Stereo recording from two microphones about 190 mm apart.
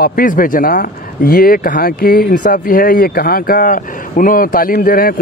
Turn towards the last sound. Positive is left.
turn(degrees=50)  # may be behind; listen again after turning